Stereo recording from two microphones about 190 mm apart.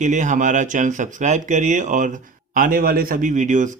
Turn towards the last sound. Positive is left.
turn(degrees=-40)  # may be behind; listen again after turning